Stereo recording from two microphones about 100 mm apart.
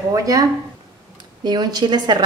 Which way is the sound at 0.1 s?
35° right (ahead or behind).